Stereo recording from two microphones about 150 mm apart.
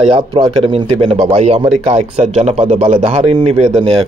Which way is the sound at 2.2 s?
50° right (ahead or behind).